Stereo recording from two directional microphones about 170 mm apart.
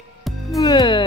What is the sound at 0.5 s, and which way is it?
Music, 25° left (ahead or behind).